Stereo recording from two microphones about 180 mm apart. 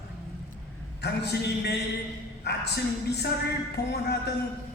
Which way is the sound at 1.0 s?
65° left (ahead or behind).